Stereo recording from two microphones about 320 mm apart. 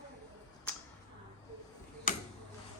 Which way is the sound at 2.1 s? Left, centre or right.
Left.